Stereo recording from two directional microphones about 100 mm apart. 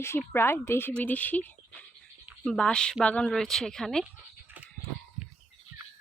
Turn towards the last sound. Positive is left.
turn(degrees=-15)  # may be behind; listen again after turning